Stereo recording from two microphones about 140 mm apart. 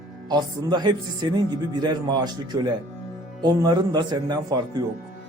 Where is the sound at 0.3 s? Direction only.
30° right (ahead or behind).